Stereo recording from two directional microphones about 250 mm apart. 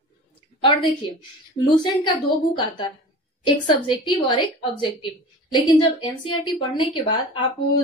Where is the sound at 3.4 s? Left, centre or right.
Centre.